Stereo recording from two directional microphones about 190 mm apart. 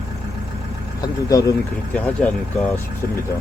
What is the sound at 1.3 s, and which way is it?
Speech, 15° left (ahead or behind).